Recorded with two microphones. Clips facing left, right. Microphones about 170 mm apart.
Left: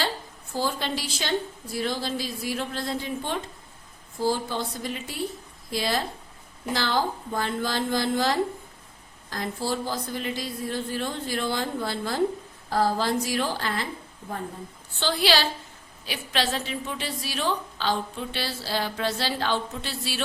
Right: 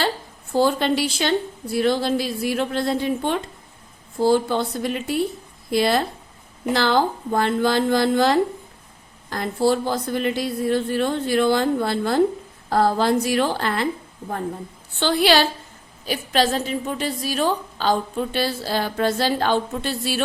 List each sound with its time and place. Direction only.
0.5 s a woman's voice: 65° right (ahead or behind)
15.0 s a woman's voice: 55° right (ahead or behind)
16.0 s a woman's voice: 45° right (ahead or behind)